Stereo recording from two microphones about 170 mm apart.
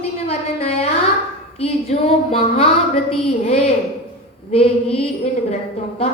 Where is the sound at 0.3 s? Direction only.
35° left (ahead or behind).